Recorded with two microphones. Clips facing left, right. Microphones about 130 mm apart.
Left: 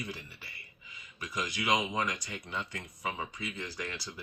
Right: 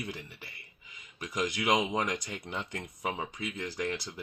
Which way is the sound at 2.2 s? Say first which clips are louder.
Right 1 dB; 50° right (ahead or behind).